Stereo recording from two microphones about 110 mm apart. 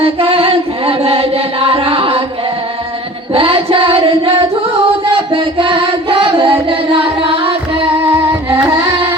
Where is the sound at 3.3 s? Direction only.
55° right (ahead or behind).